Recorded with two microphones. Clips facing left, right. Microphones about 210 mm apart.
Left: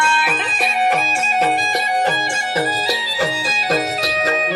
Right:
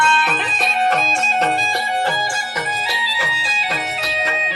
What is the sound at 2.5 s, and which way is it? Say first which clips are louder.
Music: left 6 dB; 35° left (ahead or behind).